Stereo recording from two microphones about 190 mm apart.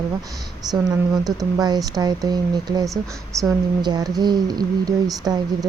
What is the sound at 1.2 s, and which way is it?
A woman's voice, 20° right (ahead or behind).